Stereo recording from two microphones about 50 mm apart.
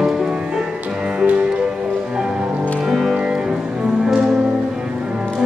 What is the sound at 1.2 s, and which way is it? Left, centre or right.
Music, right.